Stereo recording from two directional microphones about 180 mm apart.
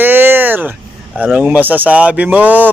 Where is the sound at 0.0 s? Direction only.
10° right (ahead or behind).